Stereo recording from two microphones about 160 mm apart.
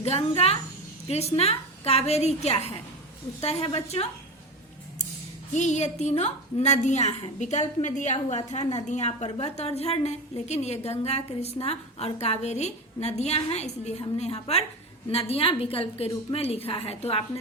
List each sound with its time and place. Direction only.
1.0 s a woman's voice: 40° left (ahead or behind)
5.5 s a woman's voice: 45° left (ahead or behind)